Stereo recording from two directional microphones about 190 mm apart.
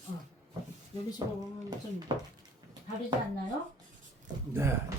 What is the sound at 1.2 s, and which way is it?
Speech, 20° right (ahead or behind).